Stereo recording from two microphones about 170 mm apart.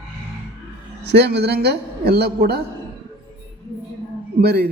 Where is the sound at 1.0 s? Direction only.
80° right.